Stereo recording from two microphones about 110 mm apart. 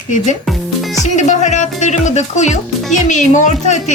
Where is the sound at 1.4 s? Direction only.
90° left.